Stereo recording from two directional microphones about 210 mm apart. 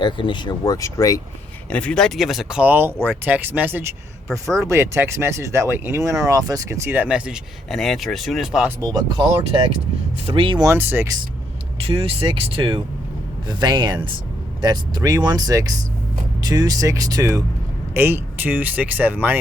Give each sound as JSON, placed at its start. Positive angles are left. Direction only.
{"t": 0.0, "sound": "speech", "side_deg": 20}
{"t": 1.7, "sound": "speech", "side_deg": 5}
{"t": 8.8, "sound": "speech", "side_deg": -20}
{"t": 10.7, "sound": "speech", "side_deg": -10}
{"t": 11.9, "sound": "speech", "side_deg": -25}